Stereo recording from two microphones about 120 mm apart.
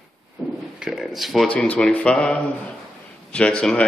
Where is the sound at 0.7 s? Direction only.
5° right (ahead or behind).